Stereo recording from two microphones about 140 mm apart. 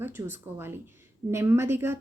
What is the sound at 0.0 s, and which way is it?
A woman's voice, 15° right (ahead or behind).